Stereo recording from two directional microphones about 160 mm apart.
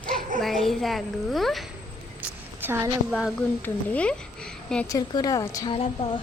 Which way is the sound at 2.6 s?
15° right (ahead or behind).